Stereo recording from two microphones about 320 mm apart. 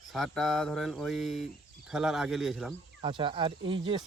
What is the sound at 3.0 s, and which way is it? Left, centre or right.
Speech, centre.